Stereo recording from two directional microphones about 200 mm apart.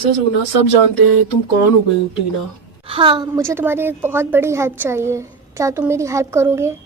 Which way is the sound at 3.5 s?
10° right (ahead or behind).